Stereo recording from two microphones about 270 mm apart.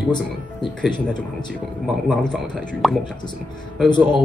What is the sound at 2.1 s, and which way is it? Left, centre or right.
Speech, centre.